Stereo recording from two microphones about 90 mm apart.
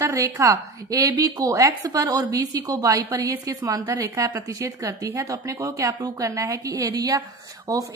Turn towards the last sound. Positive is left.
turn(degrees=-40)  # may be behind; listen again after turning